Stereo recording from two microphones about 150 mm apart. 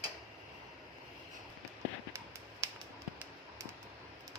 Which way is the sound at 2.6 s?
20° right (ahead or behind).